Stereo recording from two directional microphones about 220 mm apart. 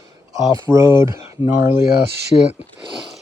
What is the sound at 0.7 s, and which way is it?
Speech, 15° right (ahead or behind).